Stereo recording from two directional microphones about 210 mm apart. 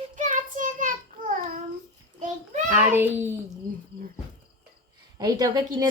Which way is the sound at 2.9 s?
10° right (ahead or behind).